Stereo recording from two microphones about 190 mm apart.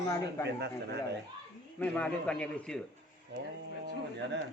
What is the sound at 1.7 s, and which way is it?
A man's voice, 10° left (ahead or behind).